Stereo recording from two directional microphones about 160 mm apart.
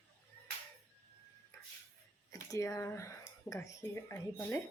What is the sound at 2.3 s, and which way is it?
A woman's voice, 20° left (ahead or behind).